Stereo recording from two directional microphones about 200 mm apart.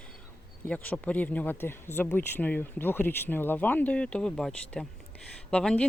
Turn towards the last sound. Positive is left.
turn(degrees=5)  # may be behind; listen again after turning